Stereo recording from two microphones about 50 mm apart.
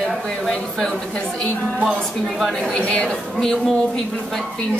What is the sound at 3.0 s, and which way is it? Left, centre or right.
Speech, centre.